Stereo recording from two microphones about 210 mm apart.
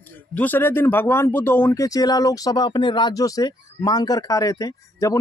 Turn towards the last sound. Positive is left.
turn(degrees=15)  # may be behind; listen again after turning